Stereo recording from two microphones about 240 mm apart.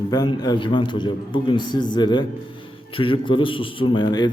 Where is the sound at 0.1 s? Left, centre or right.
Centre.